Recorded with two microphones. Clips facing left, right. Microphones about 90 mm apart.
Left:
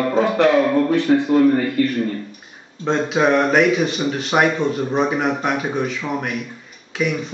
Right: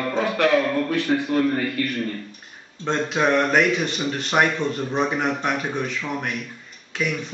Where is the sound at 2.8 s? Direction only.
Centre (ahead or behind).